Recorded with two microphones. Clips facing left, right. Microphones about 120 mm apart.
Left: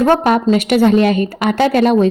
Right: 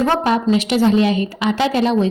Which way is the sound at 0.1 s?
55° left (ahead or behind).